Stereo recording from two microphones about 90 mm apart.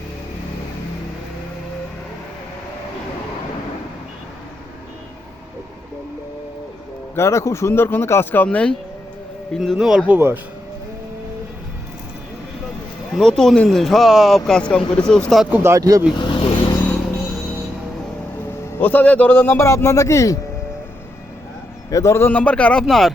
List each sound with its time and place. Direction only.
7.2 s a man's voice: 35° left (ahead or behind)
8.4 s a man's voice: 10° left (ahead or behind)
9.6 s speech: 5° right (ahead or behind)
10.1 s speech: 25° right (ahead or behind)
13.1 s speech: 5° left (ahead or behind)
15.6 s speech: 40° right (ahead or behind)
16.2 s vehicle: 70° left (ahead or behind)
18.7 s a man's voice: 20° left (ahead or behind); by 20.4 s 35° left (ahead or behind)
21.8 s a man's voice: 35° left (ahead or behind)
22.3 s a man's voice: 15° left (ahead or behind)
22.8 s speech: centre (ahead or behind)